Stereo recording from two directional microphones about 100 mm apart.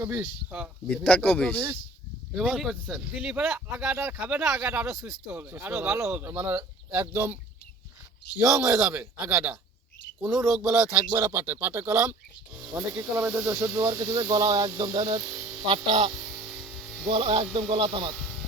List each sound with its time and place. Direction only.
0.0 s speech: 20° right (ahead or behind)
1.0 s speech: 15° left (ahead or behind)
2.4 s speech: 5° right (ahead or behind)
3.2 s speech: 15° right (ahead or behind)
8.4 s speech: 30° right (ahead or behind)
8.6 s a man's voice: 5° right (ahead or behind)
11.2 s speech: 20° right (ahead or behind)
12.5 s speech: 15° right (ahead or behind)
14.0 s speech: 40° right (ahead or behind)
15.3 s a sound: 15° right (ahead or behind)
15.6 s speech: 55° right (ahead or behind)
16.1 s a sound: 10° right (ahead or behind)
17.1 s speech: 65° right (ahead or behind)
18.1 s a sound: 5° left (ahead or behind)